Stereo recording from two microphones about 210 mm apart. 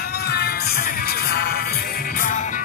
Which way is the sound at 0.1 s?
50° left (ahead or behind).